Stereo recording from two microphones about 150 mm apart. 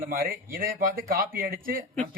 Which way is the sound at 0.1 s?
65° right (ahead or behind).